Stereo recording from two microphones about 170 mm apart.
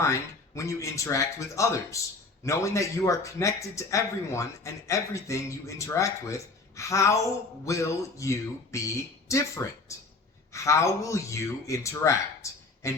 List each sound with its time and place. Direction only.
0.0 s a man's voice: 15° left (ahead or behind)